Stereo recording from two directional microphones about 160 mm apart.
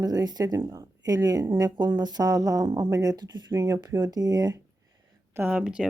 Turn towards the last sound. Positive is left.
turn(degrees=-5)  # may be behind; listen again after turning